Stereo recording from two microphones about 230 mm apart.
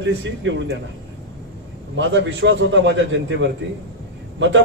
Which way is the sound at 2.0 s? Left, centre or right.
Right.